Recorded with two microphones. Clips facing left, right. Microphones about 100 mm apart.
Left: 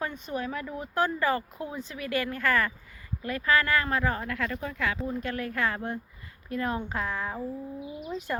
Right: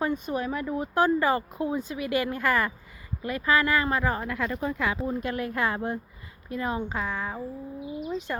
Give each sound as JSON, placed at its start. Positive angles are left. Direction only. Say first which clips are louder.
{"t": 0.0, "sound": "a woman's voice", "louder": "right 5 dB", "side_deg": -15}